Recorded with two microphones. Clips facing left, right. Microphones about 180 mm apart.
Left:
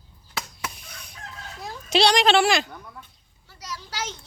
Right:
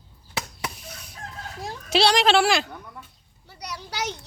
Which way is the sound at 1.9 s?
5° right (ahead or behind).